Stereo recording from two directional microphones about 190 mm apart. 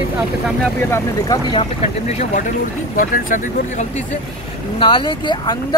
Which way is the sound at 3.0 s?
45° left (ahead or behind).